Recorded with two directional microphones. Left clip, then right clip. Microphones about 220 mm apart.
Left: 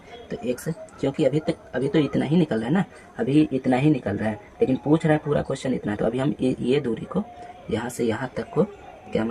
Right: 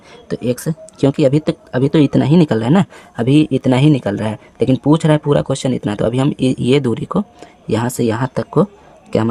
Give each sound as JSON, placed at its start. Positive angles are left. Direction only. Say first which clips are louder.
{"t": 0.3, "sound": "speech", "louder": "right 9 dB", "side_deg": -40}